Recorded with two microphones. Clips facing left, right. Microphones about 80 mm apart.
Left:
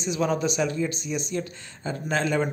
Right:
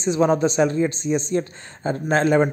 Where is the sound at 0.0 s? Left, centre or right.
Right.